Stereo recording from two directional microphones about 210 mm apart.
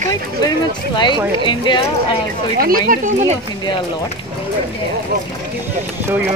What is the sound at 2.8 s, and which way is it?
Speech, 40° right (ahead or behind).